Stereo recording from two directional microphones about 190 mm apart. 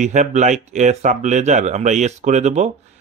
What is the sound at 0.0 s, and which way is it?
Speech, 40° right (ahead or behind).